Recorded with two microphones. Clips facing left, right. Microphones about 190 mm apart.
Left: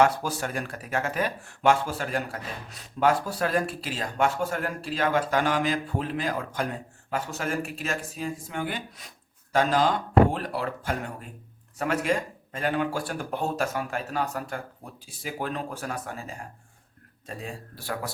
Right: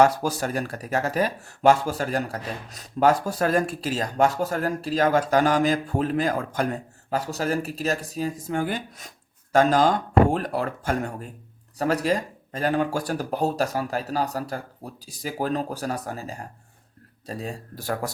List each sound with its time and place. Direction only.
0.0 s speech: 40° right (ahead or behind)